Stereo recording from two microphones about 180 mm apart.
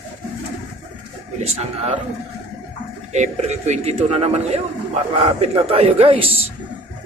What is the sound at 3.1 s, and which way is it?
Speech, 40° right (ahead or behind).